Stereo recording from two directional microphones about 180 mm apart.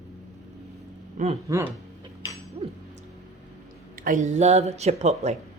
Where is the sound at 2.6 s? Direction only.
35° right (ahead or behind).